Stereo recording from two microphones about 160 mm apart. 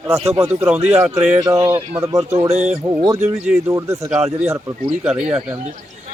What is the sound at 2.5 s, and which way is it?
Speech, 45° right (ahead or behind).